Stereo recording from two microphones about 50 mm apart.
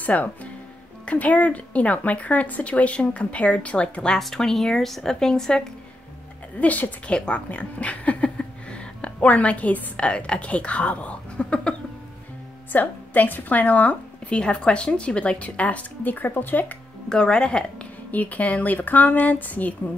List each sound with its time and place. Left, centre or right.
0.0 s speech: left
4.2 s speech: centre
6.6 s speech: left
7.1 s speech: left
12.7 s a woman's voice: left
17.1 s speech: centre
18.1 s speech: left